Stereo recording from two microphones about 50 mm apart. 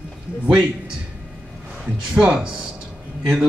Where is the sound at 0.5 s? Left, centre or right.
Right.